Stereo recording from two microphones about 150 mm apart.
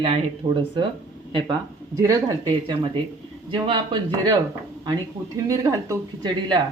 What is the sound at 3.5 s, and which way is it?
Speech, 30° right (ahead or behind).